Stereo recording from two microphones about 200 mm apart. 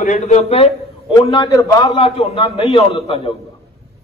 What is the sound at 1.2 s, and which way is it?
Speech, 20° left (ahead or behind).